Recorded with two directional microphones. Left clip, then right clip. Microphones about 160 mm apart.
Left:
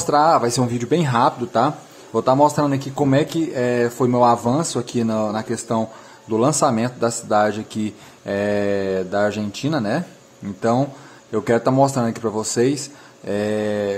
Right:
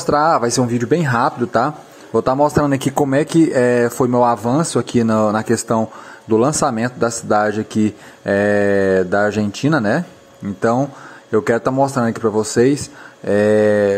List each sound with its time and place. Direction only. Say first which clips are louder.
0.1 s speech: right 1 dB; 30° right (ahead or behind)
2.6 s speech: right 4 dB; 45° right (ahead or behind)
3.1 s speech: right 4 dB; 35° right (ahead or behind)
11.3 s speech: right 2 dB; 25° right (ahead or behind)